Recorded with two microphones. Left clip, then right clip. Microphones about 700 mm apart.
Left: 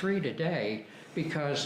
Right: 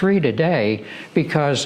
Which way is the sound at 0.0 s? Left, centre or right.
Right.